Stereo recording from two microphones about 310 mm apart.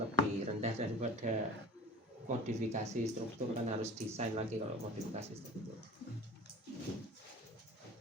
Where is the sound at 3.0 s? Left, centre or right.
Right.